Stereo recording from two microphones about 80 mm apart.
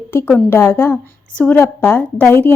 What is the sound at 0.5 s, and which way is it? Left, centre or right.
A woman's voice, left.